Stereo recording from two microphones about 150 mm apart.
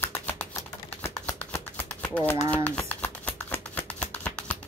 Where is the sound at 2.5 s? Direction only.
10° left (ahead or behind).